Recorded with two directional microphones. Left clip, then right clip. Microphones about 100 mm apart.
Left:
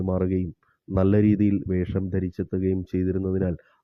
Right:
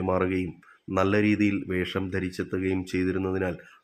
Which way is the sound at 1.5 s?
30° left (ahead or behind).